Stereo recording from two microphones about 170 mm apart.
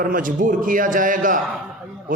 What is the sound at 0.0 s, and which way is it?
A man's voice, 55° right (ahead or behind).